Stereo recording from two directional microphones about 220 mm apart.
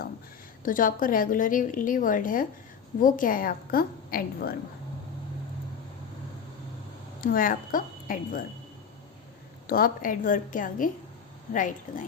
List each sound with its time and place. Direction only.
0.6 s a woman's voice: 40° left (ahead or behind)
7.2 s a woman's voice: 40° left (ahead or behind)
9.6 s a woman's voice: 40° left (ahead or behind)